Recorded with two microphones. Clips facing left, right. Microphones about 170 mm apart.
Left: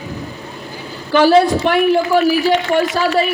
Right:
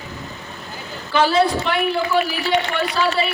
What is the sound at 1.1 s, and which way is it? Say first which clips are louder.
A man's voice: left 6 dB; 45° left (ahead or behind).